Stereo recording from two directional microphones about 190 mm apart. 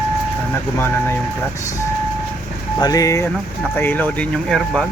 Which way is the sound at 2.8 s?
20° left (ahead or behind).